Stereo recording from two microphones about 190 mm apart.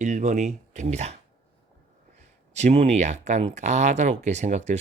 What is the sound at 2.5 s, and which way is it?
Speech, 35° right (ahead or behind).